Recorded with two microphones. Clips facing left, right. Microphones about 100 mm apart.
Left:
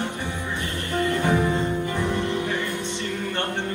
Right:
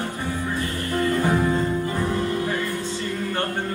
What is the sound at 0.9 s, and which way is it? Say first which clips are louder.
Music: right 1 dB; 20° left (ahead or behind).